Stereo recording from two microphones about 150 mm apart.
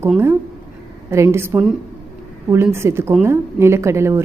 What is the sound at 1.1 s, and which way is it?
Speech, 20° right (ahead or behind).